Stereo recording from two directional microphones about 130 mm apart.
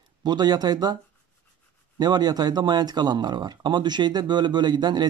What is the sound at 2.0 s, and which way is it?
Speech, 30° right (ahead or behind).